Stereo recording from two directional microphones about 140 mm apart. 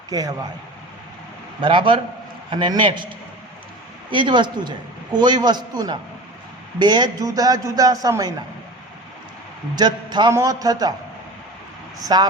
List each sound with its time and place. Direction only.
0.1 s a man's voice: 25° right (ahead or behind)
1.6 s a man's voice: 35° right (ahead or behind)
4.1 s a man's voice: 35° right (ahead or behind)
9.7 s a man's voice: 30° right (ahead or behind)
11.9 s a man's voice: 30° right (ahead or behind)